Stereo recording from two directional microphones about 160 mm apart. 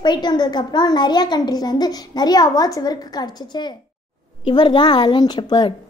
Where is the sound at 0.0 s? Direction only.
25° left (ahead or behind).